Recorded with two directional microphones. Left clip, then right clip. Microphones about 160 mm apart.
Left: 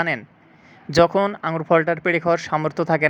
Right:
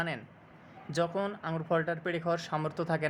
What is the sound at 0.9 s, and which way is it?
Speech, 45° left (ahead or behind).